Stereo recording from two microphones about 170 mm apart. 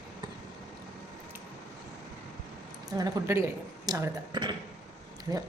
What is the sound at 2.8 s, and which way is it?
Speech, 20° right (ahead or behind).